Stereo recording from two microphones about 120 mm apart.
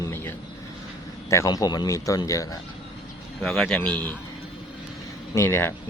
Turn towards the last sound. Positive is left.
turn(degrees=20)  # may be behind; listen again after turning